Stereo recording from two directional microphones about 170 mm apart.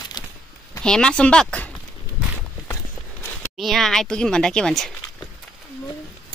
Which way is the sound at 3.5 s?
Centre (ahead or behind).